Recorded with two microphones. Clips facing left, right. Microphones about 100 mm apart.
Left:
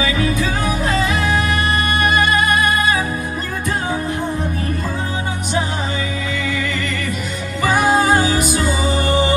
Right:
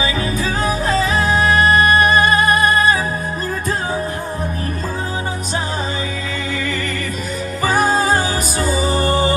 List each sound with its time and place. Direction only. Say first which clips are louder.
0.0 s music: left 1 dB; 35° right (ahead or behind)
7.6 s music: left 1 dB; 35° right (ahead or behind)